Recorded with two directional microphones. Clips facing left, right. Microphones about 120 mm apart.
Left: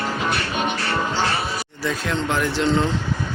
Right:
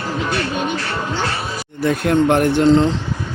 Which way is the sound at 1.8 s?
60° right (ahead or behind).